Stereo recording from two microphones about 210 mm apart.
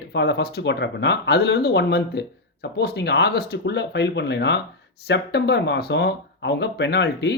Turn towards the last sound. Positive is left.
turn(degrees=55)  # may be behind; listen again after turning